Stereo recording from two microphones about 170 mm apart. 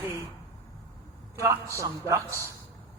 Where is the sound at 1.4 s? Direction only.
15° right (ahead or behind).